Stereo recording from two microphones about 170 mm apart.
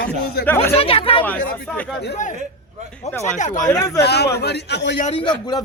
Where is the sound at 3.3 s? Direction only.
45° left (ahead or behind).